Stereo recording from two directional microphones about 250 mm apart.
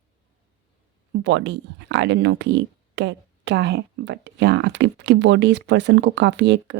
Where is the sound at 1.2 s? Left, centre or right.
Right.